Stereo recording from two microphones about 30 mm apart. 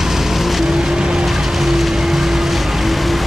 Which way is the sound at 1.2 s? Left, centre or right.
Centre.